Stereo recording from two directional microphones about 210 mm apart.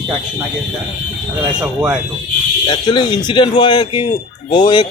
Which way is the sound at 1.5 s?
5° right (ahead or behind).